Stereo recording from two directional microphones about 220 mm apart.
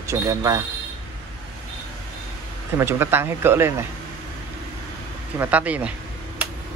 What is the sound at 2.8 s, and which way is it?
Speech, 10° right (ahead or behind).